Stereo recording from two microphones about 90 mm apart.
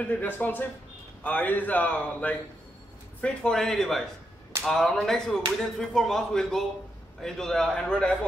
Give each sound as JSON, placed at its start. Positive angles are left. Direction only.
{"t": 0.0, "sound": "a man's voice", "side_deg": 20}